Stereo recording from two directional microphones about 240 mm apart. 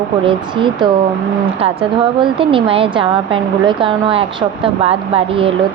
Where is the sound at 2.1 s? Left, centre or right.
Right.